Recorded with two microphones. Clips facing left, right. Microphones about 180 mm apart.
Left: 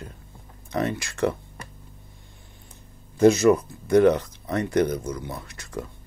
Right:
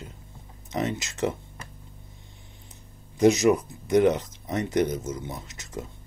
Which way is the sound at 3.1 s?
15° right (ahead or behind).